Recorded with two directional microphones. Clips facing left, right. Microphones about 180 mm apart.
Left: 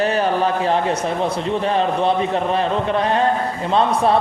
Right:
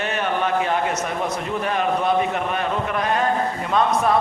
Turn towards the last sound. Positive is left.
turn(degrees=30)  # may be behind; listen again after turning